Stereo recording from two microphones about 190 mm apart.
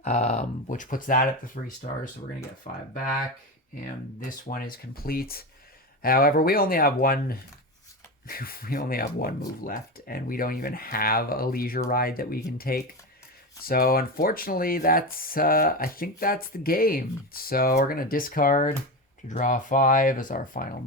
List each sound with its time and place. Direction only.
0.0 s speech: 35° left (ahead or behind)
4.3 s speech: 45° left (ahead or behind)